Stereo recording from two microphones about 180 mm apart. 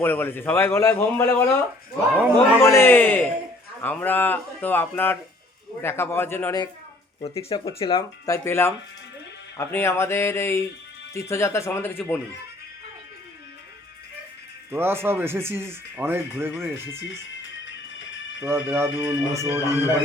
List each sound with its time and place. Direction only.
0.0 s a man's voice: 10° left (ahead or behind)
2.5 s a man's voice: 15° left (ahead or behind)
7.2 s speech: 30° left (ahead or behind)
8.3 s a man's voice: 15° left (ahead or behind)
14.7 s speech: 15° right (ahead or behind)
17.4 s music: 90° left
18.3 s speech: 10° right (ahead or behind)